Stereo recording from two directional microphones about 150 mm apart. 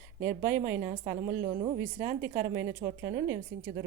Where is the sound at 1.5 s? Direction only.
40° right (ahead or behind).